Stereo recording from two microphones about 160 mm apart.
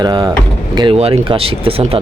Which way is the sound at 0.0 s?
30° right (ahead or behind).